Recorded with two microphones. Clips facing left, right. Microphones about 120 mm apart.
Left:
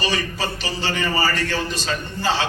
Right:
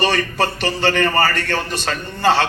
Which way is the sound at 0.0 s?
60° right (ahead or behind).